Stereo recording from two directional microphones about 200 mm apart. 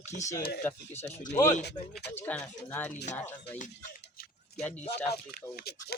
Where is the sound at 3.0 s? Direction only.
35° left (ahead or behind).